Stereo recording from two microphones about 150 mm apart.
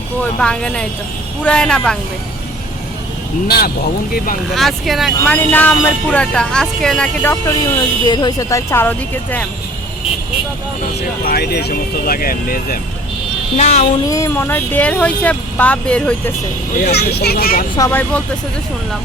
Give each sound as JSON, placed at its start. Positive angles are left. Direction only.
{"t": 0.2, "sound": "speech", "side_deg": 5}
{"t": 3.4, "sound": "speech", "side_deg": 90}
{"t": 4.5, "sound": "speech", "side_deg": 0}
{"t": 5.2, "sound": "speech", "side_deg": 10}
{"t": 8.0, "sound": "speech", "side_deg": 30}
{"t": 11.2, "sound": "speech", "side_deg": 85}
{"t": 13.6, "sound": "speech", "side_deg": 50}
{"t": 14.1, "sound": "speech", "side_deg": 20}
{"t": 16.8, "sound": "speech", "side_deg": 90}
{"t": 17.7, "sound": "speech", "side_deg": 20}